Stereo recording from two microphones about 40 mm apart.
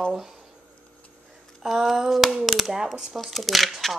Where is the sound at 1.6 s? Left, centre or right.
Centre.